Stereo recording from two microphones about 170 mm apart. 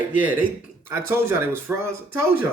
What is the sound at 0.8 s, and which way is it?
Speech, 15° right (ahead or behind).